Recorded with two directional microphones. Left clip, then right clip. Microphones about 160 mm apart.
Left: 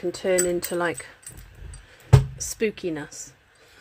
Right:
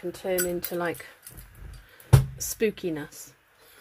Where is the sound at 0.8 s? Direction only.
10° left (ahead or behind).